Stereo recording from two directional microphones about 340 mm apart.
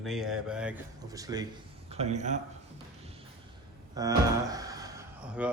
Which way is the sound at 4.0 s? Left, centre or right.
Centre.